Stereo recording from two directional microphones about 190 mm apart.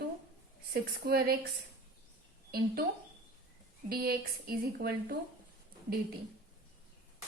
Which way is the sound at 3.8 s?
50° right (ahead or behind).